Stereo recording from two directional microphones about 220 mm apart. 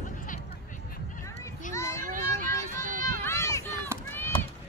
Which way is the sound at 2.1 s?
35° right (ahead or behind).